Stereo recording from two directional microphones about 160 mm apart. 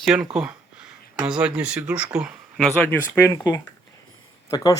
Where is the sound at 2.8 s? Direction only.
10° left (ahead or behind).